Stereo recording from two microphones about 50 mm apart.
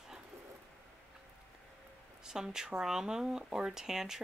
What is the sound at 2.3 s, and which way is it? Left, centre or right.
Speech, centre.